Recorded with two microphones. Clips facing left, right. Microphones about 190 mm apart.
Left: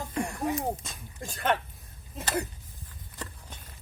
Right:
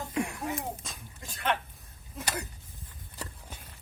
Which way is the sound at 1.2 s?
40° left (ahead or behind).